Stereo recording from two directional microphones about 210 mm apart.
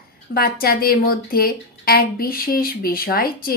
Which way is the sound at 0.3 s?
45° left (ahead or behind).